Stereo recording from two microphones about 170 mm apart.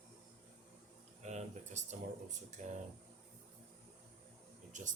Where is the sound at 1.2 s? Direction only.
40° right (ahead or behind).